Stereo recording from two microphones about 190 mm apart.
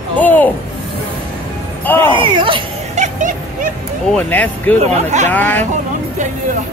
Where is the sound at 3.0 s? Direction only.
40° right (ahead or behind).